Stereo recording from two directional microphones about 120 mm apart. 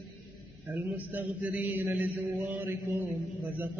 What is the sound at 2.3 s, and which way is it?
Mantra, 20° right (ahead or behind).